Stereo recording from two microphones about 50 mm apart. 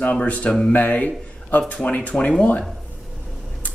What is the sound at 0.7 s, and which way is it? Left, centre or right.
A man's voice, left.